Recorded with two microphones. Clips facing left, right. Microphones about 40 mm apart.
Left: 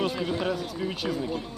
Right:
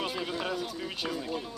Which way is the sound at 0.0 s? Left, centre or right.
Centre.